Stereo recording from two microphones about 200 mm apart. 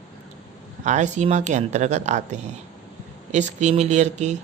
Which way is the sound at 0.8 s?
35° right (ahead or behind).